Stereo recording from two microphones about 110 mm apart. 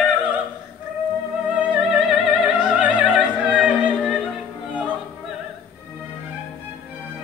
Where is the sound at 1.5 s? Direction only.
10° right (ahead or behind).